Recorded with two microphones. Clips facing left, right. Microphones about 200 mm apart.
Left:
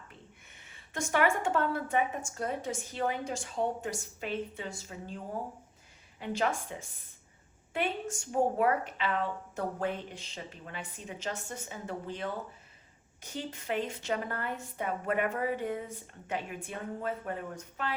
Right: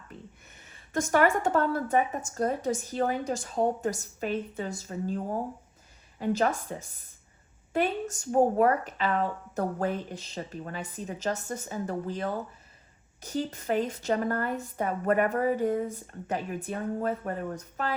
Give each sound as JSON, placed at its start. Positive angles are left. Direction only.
{"t": 0.5, "sound": "a woman's voice", "side_deg": -40}